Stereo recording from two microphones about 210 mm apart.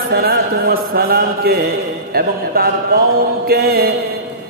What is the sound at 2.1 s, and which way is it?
Speech, 45° right (ahead or behind).